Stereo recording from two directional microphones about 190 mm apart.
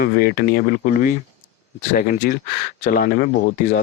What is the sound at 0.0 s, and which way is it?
Speech, 50° left (ahead or behind).